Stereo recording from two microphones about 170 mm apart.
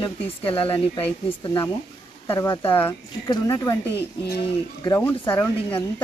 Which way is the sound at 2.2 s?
20° left (ahead or behind).